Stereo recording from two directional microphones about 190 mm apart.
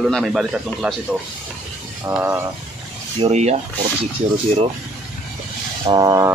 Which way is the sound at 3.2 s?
35° right (ahead or behind).